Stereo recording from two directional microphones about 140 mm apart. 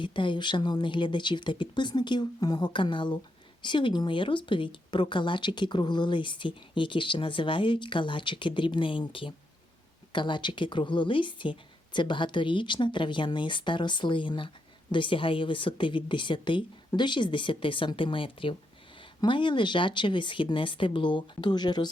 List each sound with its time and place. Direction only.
0.0 s speech: 35° left (ahead or behind)